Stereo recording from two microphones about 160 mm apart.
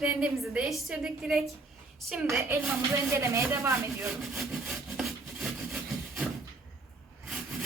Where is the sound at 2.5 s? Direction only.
15° right (ahead or behind).